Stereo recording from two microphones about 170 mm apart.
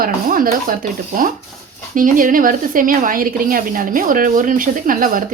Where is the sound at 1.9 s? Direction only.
50° right (ahead or behind).